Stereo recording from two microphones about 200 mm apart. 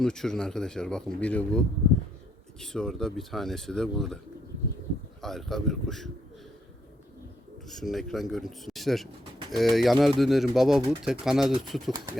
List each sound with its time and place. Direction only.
0.0 s speech: 5° left (ahead or behind)
5.2 s speech: centre (ahead or behind)
7.7 s speech: centre (ahead or behind)
11.9 s speech: 15° right (ahead or behind)